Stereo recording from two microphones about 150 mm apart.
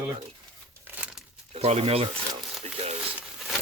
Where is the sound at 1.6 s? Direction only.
45° right (ahead or behind).